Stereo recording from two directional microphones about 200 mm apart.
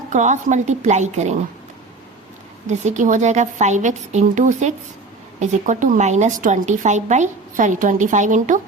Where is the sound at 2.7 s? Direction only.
35° right (ahead or behind).